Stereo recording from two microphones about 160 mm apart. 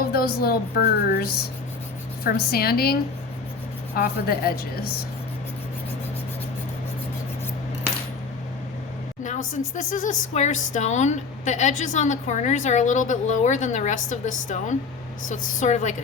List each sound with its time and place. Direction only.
0.0 s a woman's voice: 70° left (ahead or behind)
9.2 s speech: 50° left (ahead or behind)